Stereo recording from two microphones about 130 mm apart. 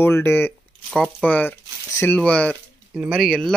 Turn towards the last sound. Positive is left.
turn(degrees=5)  # may be behind; listen again after turning